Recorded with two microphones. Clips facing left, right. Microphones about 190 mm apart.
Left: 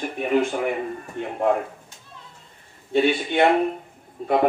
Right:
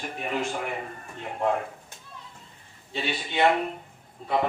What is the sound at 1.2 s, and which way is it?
Speech, 55° left (ahead or behind).